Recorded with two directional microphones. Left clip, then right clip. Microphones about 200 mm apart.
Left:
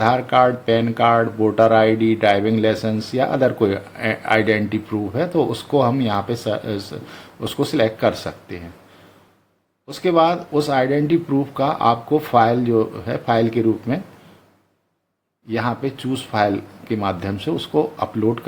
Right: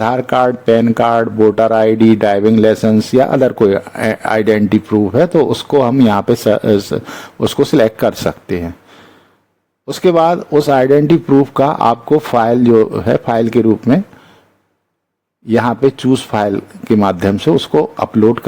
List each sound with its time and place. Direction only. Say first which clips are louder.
0.0 s speech: right 3 dB; 45° right (ahead or behind)
9.8 s speech: right 6 dB; 45° right (ahead or behind)
15.4 s speech: right 11 dB; 45° right (ahead or behind)